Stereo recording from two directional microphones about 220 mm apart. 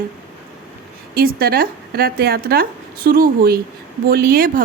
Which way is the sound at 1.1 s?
45° right (ahead or behind).